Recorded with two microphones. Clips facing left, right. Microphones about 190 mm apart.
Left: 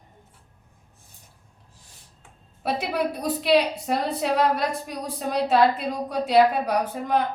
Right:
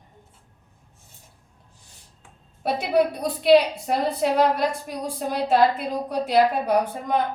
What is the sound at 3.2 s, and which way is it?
A woman's voice, centre (ahead or behind).